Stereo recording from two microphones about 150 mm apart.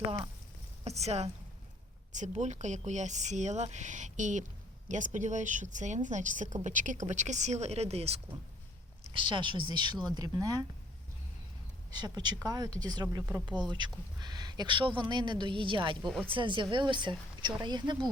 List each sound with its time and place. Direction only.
0.9 s a woman's voice: 45° right (ahead or behind)
9.1 s speech: 30° right (ahead or behind)
11.9 s speech: 30° right (ahead or behind)